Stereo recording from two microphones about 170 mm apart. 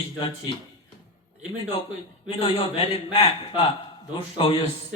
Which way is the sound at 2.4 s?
30° left (ahead or behind).